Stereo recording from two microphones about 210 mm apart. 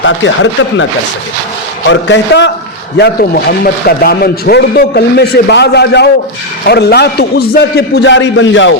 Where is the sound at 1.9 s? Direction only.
60° left (ahead or behind).